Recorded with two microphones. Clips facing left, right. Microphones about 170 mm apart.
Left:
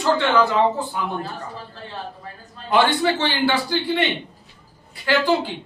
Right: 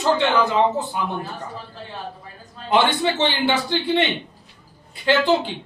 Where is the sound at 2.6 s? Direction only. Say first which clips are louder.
Left 1 dB; 20° right (ahead or behind).